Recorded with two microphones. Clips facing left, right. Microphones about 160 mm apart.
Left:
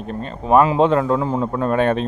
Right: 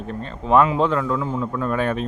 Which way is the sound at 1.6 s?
70° left (ahead or behind).